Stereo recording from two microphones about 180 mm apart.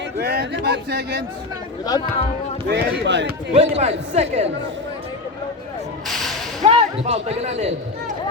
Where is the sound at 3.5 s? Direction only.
35° right (ahead or behind).